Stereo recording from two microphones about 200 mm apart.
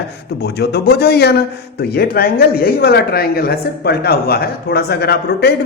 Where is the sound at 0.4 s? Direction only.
55° left (ahead or behind).